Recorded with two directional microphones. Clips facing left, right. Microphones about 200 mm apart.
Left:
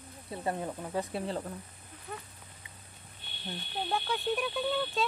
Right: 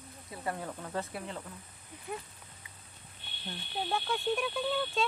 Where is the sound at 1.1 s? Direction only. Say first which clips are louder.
Left 6 dB; 35° left (ahead or behind).